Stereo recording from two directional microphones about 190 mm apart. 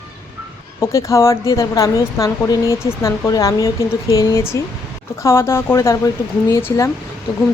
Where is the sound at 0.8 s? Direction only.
15° left (ahead or behind).